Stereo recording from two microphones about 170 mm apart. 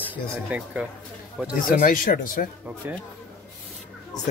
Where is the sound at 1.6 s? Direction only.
55° left (ahead or behind).